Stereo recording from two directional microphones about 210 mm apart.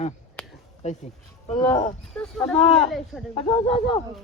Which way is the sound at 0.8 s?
35° left (ahead or behind).